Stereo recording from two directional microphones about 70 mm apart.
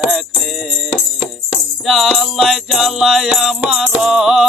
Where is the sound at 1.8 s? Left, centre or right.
Centre.